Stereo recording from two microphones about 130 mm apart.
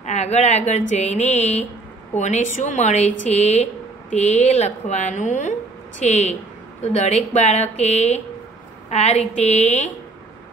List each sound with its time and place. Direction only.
0.0 s a woman's voice: 60° left (ahead or behind)